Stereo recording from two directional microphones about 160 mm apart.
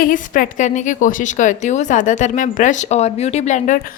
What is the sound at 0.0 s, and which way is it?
A woman's voice, 60° left (ahead or behind).